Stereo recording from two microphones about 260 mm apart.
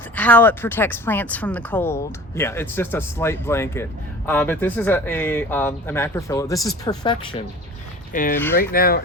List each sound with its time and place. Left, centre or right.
0.2 s speech: centre
8.1 s speech: left
8.4 s speech: centre
8.7 s speech: left